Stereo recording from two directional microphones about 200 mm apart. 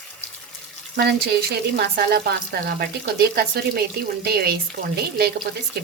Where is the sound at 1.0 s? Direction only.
55° right (ahead or behind).